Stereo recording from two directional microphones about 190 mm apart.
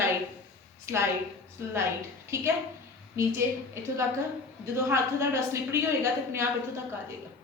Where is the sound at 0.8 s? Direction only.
15° right (ahead or behind).